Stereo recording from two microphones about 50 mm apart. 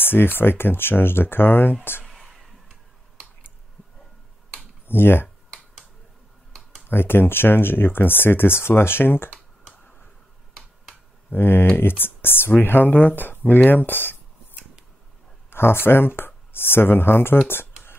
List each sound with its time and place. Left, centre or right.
0.0 s speech: left
2.0 s whispering: centre
4.8 s speech: left
6.9 s speech: left
11.3 s speech: left
15.5 s speech: left